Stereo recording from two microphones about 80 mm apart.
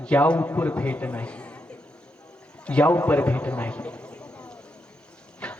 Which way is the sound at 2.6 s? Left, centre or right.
Centre.